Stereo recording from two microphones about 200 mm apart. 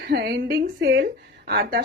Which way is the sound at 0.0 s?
50° right (ahead or behind).